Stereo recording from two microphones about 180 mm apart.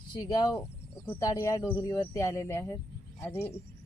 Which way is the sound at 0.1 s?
20° left (ahead or behind).